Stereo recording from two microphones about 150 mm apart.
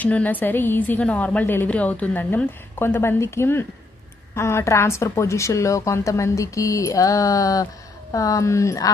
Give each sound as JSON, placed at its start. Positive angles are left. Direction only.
{"t": 0.0, "sound": "a woman's voice", "side_deg": 10}